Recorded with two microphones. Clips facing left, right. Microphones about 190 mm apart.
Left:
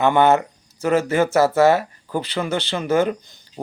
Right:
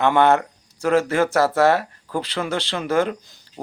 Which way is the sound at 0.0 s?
Centre (ahead or behind).